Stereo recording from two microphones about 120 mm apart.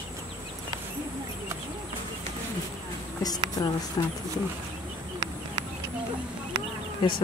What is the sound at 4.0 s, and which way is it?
Speech, 35° left (ahead or behind).